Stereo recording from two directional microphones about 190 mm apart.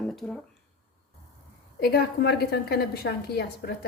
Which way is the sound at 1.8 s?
55° left (ahead or behind).